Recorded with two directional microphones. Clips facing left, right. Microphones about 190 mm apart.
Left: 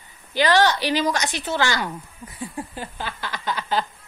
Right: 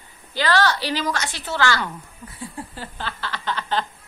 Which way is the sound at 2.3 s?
15° left (ahead or behind).